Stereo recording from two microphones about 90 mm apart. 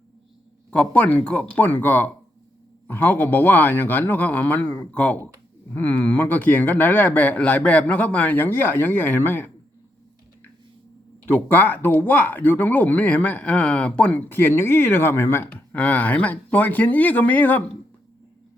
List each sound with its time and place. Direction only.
0.7 s speech: 15° left (ahead or behind)
11.3 s speech: 20° left (ahead or behind)